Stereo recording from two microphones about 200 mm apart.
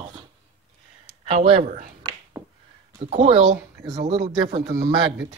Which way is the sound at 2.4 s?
10° right (ahead or behind).